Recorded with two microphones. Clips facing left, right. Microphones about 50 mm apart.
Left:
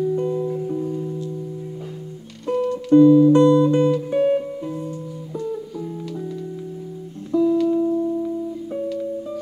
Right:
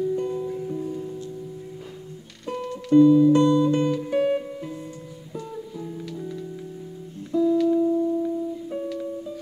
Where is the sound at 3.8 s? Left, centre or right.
Centre.